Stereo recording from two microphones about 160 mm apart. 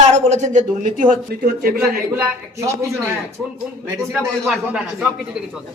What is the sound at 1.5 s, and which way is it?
Speech, 80° right.